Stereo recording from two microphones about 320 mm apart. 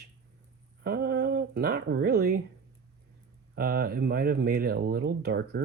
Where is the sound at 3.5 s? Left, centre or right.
Right.